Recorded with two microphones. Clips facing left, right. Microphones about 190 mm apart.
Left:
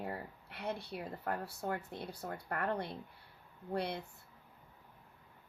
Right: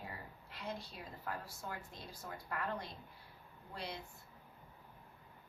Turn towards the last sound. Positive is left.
turn(degrees=60)  # may be behind; listen again after turning